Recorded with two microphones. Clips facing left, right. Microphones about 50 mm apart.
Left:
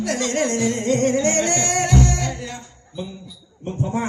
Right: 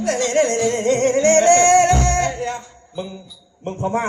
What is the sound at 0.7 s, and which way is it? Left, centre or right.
Music, right.